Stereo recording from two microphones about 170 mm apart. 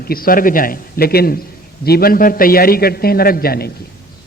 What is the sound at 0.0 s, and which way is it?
A man's voice, 60° left (ahead or behind).